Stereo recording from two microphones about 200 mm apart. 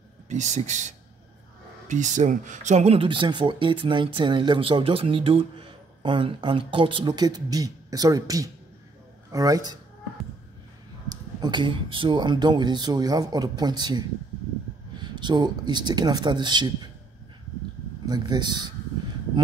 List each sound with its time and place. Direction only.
0.3 s speech: 35° right (ahead or behind); by 9.8 s 20° right (ahead or behind)
11.1 s speech: 20° right (ahead or behind)
15.1 s speech: 20° right (ahead or behind)
18.0 s speech: 20° right (ahead or behind)